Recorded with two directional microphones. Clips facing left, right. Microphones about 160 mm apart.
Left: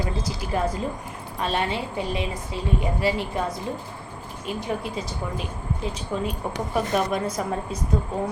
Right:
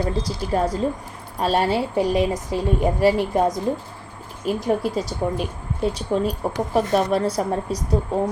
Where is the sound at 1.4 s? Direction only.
40° right (ahead or behind).